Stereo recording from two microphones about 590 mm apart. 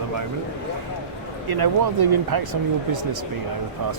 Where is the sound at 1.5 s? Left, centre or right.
Right.